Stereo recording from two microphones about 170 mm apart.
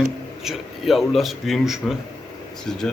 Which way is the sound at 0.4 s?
Centre (ahead or behind).